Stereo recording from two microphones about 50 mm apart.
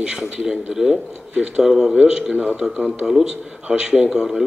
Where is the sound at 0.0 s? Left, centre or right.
Centre.